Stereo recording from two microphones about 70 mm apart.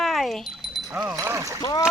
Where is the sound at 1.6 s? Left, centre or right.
Left.